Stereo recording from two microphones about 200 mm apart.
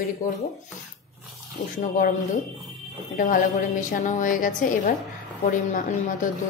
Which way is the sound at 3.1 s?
45° left (ahead or behind).